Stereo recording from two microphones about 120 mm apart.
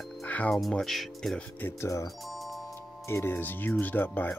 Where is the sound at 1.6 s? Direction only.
20° left (ahead or behind).